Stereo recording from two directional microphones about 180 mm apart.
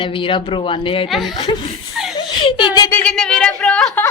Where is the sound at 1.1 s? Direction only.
Centre (ahead or behind).